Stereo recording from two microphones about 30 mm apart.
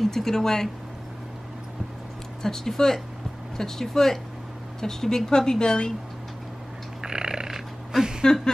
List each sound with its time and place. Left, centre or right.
0.0 s speech: centre
2.4 s speech: centre
7.0 s a sound: right